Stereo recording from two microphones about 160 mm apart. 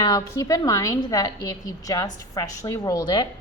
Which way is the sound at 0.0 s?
20° left (ahead or behind).